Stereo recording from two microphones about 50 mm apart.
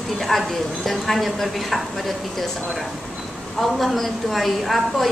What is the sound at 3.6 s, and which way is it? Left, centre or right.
A woman's voice, centre.